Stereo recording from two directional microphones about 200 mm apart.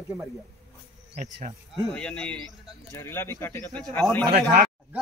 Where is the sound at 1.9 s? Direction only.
5° left (ahead or behind).